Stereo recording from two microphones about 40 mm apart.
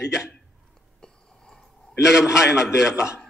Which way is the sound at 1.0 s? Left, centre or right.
Centre.